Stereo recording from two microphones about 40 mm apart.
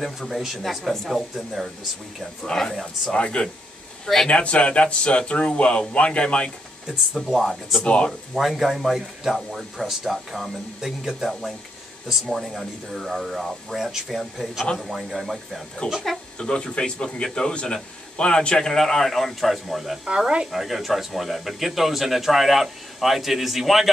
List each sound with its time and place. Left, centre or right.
0.0 s speech: centre
2.4 s a man's voice: centre
3.1 s speech: left
7.2 s speech: centre
7.8 s speech: left
8.4 s speech: centre
15.8 s a man's voice: left; by 23.9 s centre